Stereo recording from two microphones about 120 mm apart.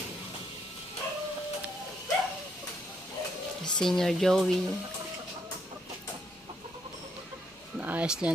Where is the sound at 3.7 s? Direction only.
5° left (ahead or behind).